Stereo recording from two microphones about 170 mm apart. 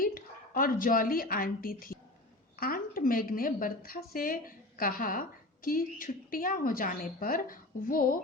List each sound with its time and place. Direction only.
0.0 s a woman's voice: 55° left (ahead or behind)